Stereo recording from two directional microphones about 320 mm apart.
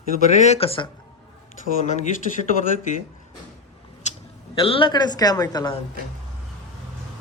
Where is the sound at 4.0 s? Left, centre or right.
Centre.